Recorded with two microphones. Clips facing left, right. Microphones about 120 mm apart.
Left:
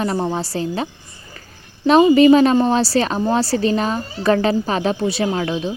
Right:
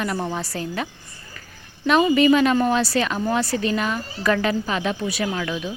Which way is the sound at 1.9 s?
35° left (ahead or behind).